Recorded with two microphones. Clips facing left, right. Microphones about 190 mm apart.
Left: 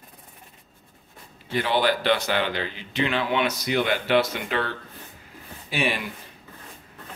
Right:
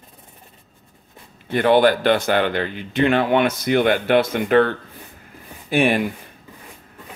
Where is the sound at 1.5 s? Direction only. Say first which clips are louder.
Right 8 dB; 55° right (ahead or behind).